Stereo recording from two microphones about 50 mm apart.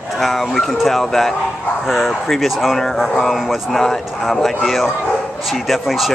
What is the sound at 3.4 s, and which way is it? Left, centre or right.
Speech, centre.